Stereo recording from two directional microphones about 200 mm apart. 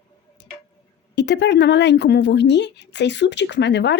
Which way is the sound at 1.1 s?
60° left (ahead or behind).